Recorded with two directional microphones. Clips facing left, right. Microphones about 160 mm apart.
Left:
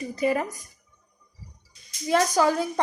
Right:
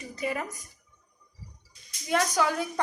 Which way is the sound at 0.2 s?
35° left (ahead or behind).